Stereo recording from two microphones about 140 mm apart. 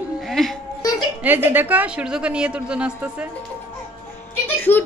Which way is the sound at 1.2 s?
15° right (ahead or behind).